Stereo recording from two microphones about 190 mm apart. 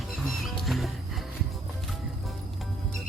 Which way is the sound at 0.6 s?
Centre (ahead or behind).